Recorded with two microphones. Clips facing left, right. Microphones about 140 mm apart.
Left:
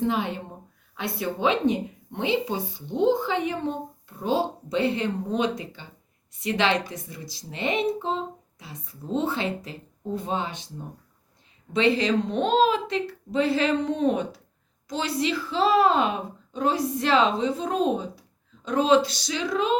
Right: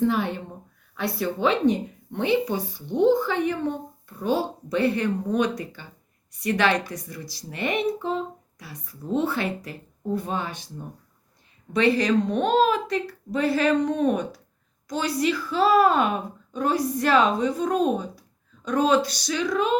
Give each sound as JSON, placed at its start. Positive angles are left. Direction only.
{"t": 0.0, "sound": "a woman's voice", "side_deg": 20}
{"t": 7.9, "sound": "a sound", "side_deg": 25}
{"t": 9.1, "sound": "speech", "side_deg": 20}
{"t": 11.7, "sound": "speech", "side_deg": 20}